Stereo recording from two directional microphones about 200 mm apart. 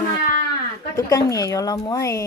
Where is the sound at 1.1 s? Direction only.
15° left (ahead or behind).